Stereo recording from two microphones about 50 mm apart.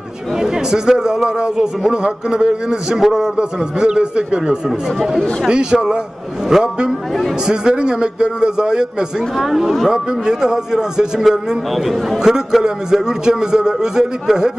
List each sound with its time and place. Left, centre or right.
0.4 s a man's voice: centre
4.6 s a man's voice: centre
5.5 s a man's voice: centre
11.2 s a man's voice: centre
12.2 s a man's voice: centre